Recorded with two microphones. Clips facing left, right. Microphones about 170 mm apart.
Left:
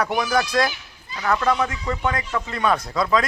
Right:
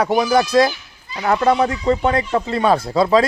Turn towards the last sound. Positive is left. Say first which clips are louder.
# right 6 dB
turn(degrees=-30)  # may be behind; listen again after turning